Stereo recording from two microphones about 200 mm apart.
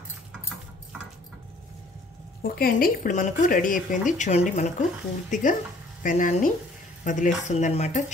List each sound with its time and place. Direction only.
2.4 s speech: 50° left (ahead or behind)